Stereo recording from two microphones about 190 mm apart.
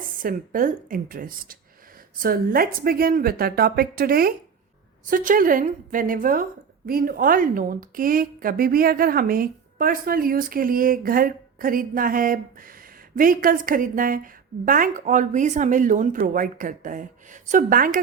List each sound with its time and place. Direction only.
0.2 s a woman's voice: 45° right (ahead or behind)